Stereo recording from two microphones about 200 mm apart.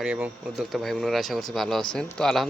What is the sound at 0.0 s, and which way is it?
Speech, 5° right (ahead or behind).